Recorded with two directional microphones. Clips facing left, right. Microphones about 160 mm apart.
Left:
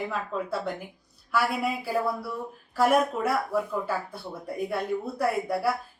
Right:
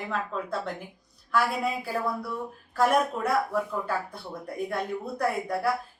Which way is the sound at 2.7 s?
5° left (ahead or behind).